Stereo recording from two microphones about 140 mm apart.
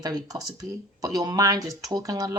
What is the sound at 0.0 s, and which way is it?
Speech, 25° right (ahead or behind).